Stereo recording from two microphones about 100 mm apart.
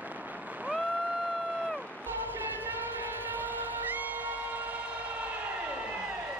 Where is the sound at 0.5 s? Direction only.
15° right (ahead or behind).